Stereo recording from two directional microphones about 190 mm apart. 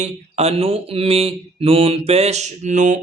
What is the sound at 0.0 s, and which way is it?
Mantra, 30° right (ahead or behind).